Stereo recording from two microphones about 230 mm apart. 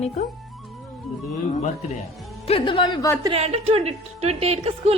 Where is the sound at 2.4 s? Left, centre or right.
Left.